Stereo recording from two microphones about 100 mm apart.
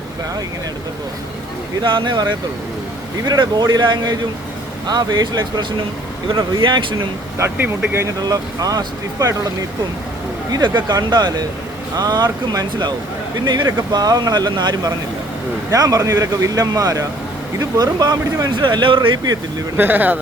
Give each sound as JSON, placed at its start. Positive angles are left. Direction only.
{"t": 1.8, "sound": "speech", "side_deg": -55}
{"t": 3.2, "sound": "speech", "side_deg": -45}
{"t": 7.3, "sound": "speech", "side_deg": -25}
{"t": 8.2, "sound": "a man's voice", "side_deg": -40}
{"t": 10.8, "sound": "speech", "side_deg": -45}
{"t": 15.7, "sound": "a man's voice", "side_deg": -40}
{"t": 18.5, "sound": "speech", "side_deg": -55}
{"t": 19.7, "sound": "speech", "side_deg": -20}